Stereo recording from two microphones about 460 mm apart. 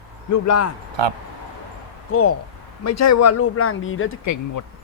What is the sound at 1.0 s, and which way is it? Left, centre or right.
Speech, right.